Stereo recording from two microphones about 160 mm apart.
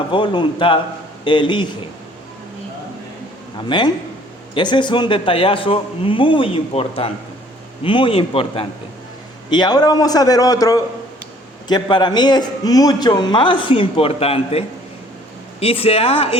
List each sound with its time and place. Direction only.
0.1 s a man's voice: 30° left (ahead or behind)
3.7 s a man's voice: 30° left (ahead or behind)
15.6 s a man's voice: 35° left (ahead or behind)